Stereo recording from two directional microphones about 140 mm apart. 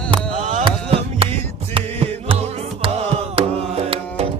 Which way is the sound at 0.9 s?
45° right (ahead or behind).